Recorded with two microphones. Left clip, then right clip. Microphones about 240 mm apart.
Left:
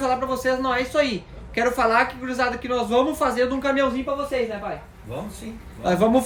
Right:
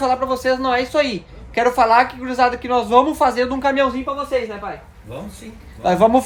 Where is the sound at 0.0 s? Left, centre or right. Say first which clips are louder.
Right 4 dB; centre.